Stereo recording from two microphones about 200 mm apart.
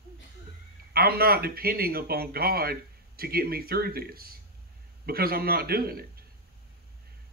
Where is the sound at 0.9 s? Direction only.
50° right (ahead or behind).